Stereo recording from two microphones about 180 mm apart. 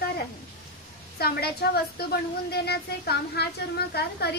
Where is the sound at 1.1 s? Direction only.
60° left (ahead or behind).